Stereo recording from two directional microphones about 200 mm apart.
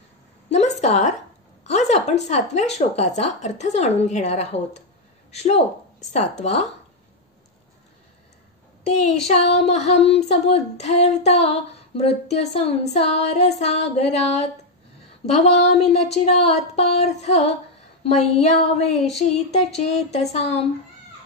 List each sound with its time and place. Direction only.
0.5 s a woman's voice: 35° left (ahead or behind)
5.3 s female singing: 30° left (ahead or behind)
8.9 s female singing: 35° left (ahead or behind)